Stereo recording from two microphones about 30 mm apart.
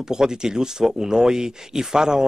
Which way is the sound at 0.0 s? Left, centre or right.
Right.